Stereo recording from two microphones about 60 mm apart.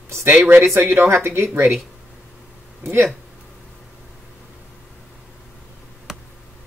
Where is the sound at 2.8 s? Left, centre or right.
Right.